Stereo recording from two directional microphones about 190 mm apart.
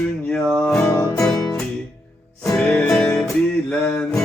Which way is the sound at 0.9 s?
15° left (ahead or behind).